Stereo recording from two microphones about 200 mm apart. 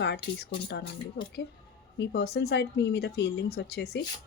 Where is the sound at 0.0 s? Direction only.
55° left (ahead or behind).